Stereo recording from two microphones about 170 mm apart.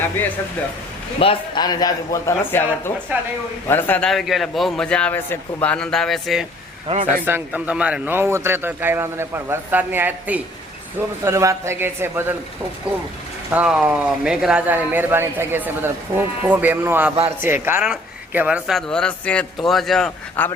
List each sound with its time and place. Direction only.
1.2 s a man's voice: 30° left (ahead or behind); by 6.5 s centre (ahead or behind)
6.8 s a man's voice: 40° right (ahead or behind)
7.3 s a man's voice: 10° right (ahead or behind)
13.5 s a man's voice: 5° right (ahead or behind)